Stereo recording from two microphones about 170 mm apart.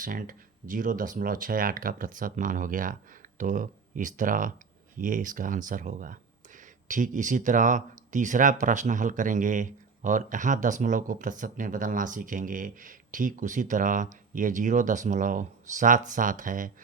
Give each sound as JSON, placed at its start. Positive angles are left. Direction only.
{"t": 0.0, "sound": "speech", "side_deg": -55}